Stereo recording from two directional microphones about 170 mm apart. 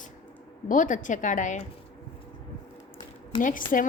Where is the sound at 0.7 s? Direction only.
50° left (ahead or behind).